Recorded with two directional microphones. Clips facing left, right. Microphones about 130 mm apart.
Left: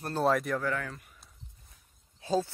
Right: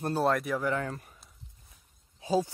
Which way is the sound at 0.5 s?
20° right (ahead or behind).